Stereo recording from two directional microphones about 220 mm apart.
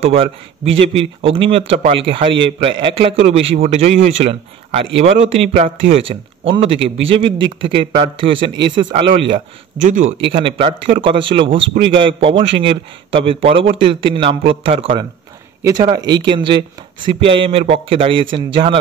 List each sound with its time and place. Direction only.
0.0 s a man's voice: 25° right (ahead or behind)
9.8 s a man's voice: 35° right (ahead or behind)
10.3 s a man's voice: 25° right (ahead or behind)